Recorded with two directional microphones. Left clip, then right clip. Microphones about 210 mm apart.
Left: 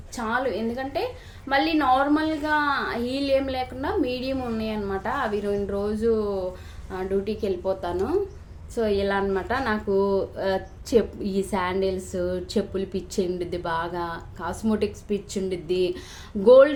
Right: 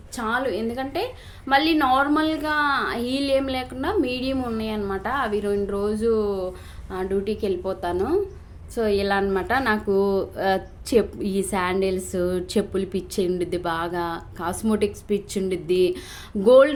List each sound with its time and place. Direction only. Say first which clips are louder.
0.2 s a woman's voice: right 1 dB; 20° right (ahead or behind)